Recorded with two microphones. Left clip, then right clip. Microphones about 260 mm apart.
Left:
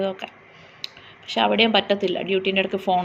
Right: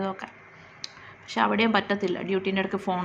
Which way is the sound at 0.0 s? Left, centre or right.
Centre.